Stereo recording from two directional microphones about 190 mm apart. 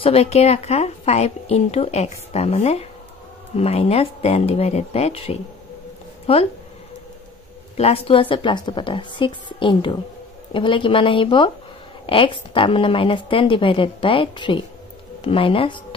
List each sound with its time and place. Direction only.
0.0 s a woman's voice: 30° left (ahead or behind)
7.7 s a woman's voice: 30° left (ahead or behind)